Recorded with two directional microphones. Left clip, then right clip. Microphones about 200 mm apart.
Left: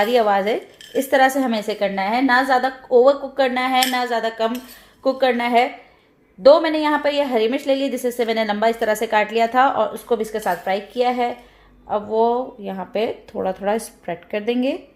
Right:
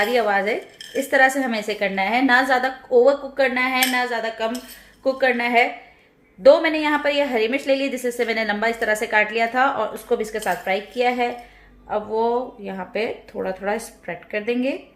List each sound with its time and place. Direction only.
0.0 s speech: 30° left (ahead or behind)
6.4 s a woman's voice: 20° left (ahead or behind)